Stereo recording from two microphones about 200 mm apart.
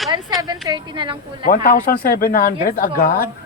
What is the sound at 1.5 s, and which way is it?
A woman's voice, 45° left (ahead or behind).